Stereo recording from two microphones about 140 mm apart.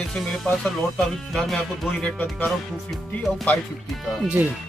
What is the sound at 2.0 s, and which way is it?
Speech, 10° left (ahead or behind).